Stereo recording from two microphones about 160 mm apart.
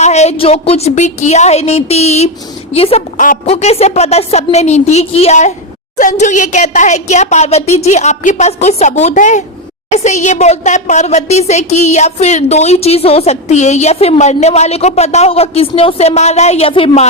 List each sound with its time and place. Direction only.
0.0 s a woman's voice: 45° left (ahead or behind)
3.2 s a woman's voice: 50° left (ahead or behind)